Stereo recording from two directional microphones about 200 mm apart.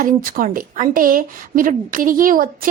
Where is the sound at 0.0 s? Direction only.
45° right (ahead or behind).